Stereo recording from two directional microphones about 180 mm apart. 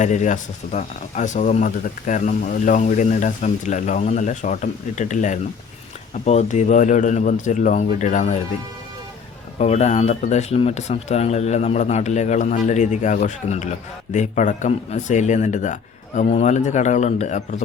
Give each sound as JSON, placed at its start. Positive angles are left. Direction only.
{"t": 0.0, "sound": "speech", "side_deg": 45}
{"t": 9.6, "sound": "speech", "side_deg": 40}